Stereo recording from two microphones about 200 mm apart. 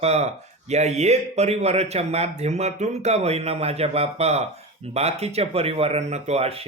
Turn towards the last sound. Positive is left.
turn(degrees=-30)  # may be behind; listen again after turning